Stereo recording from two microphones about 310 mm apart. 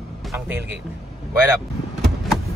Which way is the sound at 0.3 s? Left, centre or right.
Centre.